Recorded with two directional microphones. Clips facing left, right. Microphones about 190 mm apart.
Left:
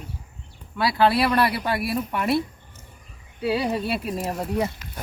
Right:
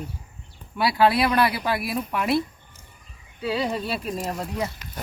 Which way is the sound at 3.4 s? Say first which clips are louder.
Left 2 dB; 5° left (ahead or behind).